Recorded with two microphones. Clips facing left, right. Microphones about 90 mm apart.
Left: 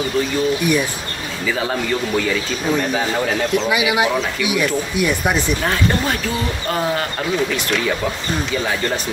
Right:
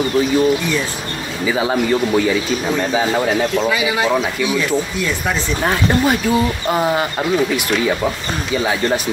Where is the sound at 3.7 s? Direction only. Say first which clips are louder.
Right 1 dB; 15° left (ahead or behind).